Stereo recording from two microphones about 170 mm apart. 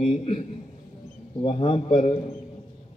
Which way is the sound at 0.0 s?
35° left (ahead or behind).